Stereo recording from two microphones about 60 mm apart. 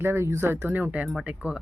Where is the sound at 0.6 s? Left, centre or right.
Right.